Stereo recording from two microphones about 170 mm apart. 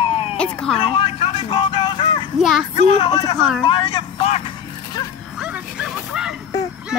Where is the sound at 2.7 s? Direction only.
40° left (ahead or behind).